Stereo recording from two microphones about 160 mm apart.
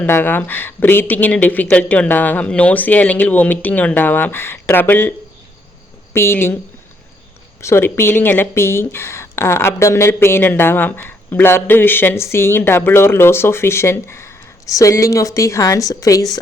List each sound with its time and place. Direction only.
0.0 s speech: 15° left (ahead or behind)
6.1 s speech: 15° left (ahead or behind)
7.6 s speech: 15° left (ahead or behind)